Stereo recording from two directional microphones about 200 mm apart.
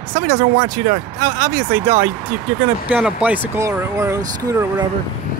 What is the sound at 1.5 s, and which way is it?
Speech, 10° right (ahead or behind).